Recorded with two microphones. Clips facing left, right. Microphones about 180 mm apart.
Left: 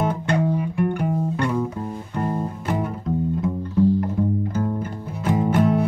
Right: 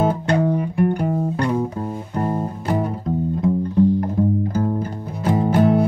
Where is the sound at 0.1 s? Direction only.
35° right (ahead or behind).